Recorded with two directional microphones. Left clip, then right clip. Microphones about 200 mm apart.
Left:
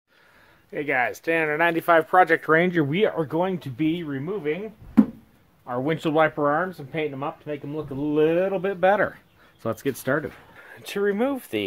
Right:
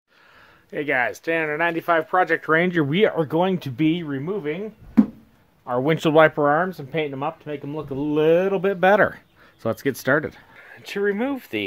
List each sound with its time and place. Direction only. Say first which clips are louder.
0.7 s speech: right 2 dB; 25° right (ahead or behind)
1.3 s speech: left 1 dB; centre (ahead or behind)
1.6 s speech: left 1 dB; 15° left (ahead or behind)
2.6 s speech: right 1 dB; 10° right (ahead or behind)
2.9 s speech: right 3 dB; 25° right (ahead or behind)
5.7 s speech: right 5 dB; 45° right (ahead or behind)
9.6 s speech: right 3 dB; 15° right (ahead or behind)
10.6 s speech: right 1 dB; 5° left (ahead or behind)